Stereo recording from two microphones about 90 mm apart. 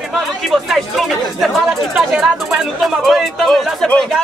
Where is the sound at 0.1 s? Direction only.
Centre (ahead or behind).